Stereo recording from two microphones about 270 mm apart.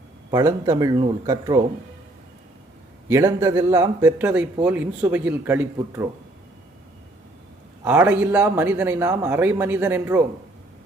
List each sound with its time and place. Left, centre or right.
0.3 s a man's voice: centre
3.1 s a man's voice: centre
7.9 s a man's voice: centre